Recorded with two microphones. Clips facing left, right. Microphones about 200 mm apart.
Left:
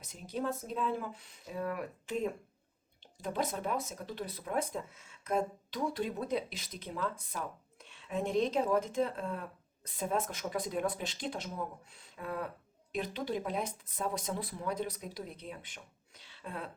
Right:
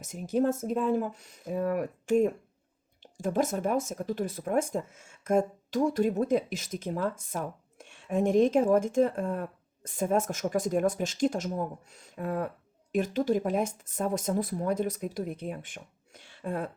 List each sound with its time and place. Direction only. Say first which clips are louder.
0.0 s speech: right 10 dB; 45° right (ahead or behind)